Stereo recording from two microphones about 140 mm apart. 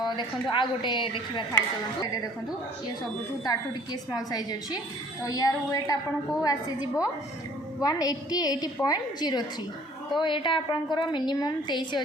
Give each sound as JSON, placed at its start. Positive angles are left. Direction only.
{"t": 0.5, "sound": "a woman's voice", "side_deg": 35}
{"t": 4.1, "sound": "a woman's voice", "side_deg": 25}